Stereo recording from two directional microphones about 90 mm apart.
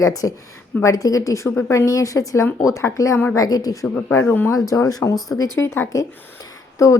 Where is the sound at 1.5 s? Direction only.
25° left (ahead or behind); by 3.8 s 40° left (ahead or behind).